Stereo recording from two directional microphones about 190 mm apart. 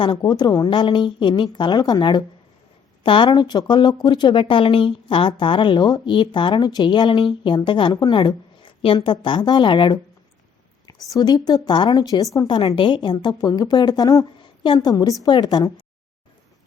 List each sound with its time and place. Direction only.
0.0 s speech: 25° left (ahead or behind)